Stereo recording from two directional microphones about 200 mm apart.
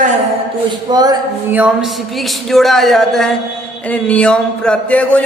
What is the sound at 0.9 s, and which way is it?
Speech, 20° right (ahead or behind).